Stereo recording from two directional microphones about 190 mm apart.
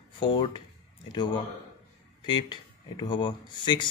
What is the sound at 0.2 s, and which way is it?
A man's voice, 25° left (ahead or behind).